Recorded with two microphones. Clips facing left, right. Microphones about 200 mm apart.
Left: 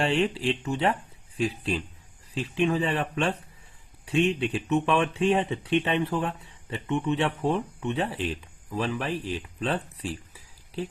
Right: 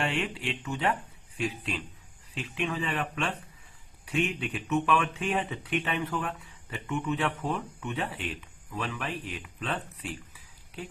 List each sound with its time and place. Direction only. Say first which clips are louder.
0.0 s speech: left 6 dB; 30° left (ahead or behind)